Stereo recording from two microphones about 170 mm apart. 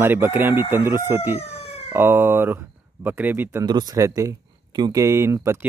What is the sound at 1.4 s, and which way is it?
Police car, 40° left (ahead or behind).